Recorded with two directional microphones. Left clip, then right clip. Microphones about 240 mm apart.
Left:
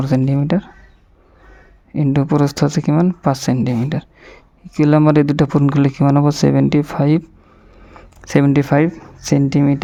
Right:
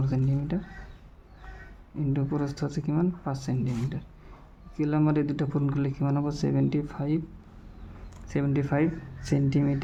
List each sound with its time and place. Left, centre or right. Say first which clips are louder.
0.0 s speech: left 14 dB; left
2.0 s speech: left 14 dB; left
8.3 s speech: left 14 dB; left